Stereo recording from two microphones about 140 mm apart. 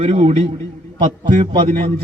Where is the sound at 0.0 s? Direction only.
50° right (ahead or behind).